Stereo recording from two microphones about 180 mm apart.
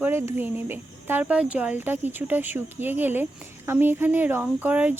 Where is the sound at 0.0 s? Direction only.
15° right (ahead or behind).